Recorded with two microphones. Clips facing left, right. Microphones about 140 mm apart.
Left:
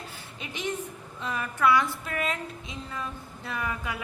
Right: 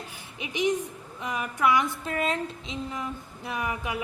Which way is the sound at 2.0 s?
30° right (ahead or behind).